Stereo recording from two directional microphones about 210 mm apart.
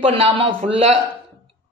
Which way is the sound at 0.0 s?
25° right (ahead or behind).